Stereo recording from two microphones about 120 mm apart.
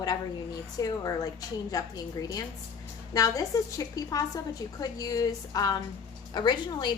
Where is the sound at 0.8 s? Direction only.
30° left (ahead or behind).